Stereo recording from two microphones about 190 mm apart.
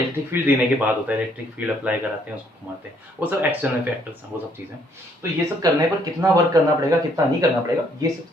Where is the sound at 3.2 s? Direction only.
10° right (ahead or behind).